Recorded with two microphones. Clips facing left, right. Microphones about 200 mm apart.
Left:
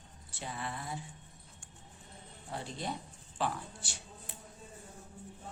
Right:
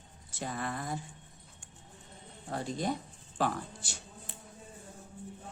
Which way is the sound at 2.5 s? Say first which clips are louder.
Right 6 dB; 45° right (ahead or behind).